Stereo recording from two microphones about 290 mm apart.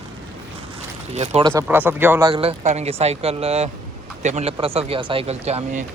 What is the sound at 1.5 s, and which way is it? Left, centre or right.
A man's voice, centre.